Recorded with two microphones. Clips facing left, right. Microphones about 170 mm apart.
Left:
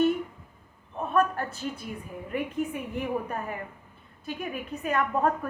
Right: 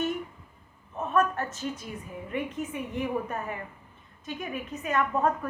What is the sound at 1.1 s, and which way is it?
Speech, 35° left (ahead or behind).